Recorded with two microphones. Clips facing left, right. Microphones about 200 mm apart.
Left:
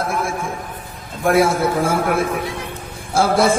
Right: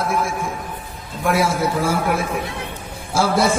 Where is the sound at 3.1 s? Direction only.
55° left (ahead or behind).